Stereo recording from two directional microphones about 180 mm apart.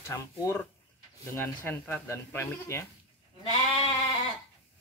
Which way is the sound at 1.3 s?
10° left (ahead or behind).